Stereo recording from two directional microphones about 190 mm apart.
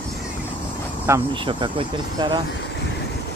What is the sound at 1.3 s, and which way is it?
Speech, 25° right (ahead or behind).